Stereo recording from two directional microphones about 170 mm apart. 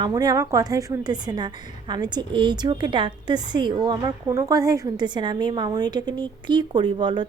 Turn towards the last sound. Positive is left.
turn(degrees=-25)  # may be behind; listen again after turning